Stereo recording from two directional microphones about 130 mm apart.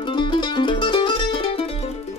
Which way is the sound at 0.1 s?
40° left (ahead or behind).